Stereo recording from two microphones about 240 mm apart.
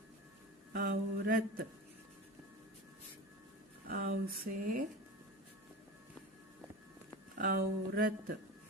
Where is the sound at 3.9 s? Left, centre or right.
Right.